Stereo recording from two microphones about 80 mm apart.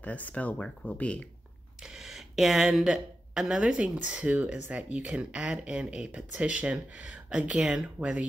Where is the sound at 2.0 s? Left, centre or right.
Centre.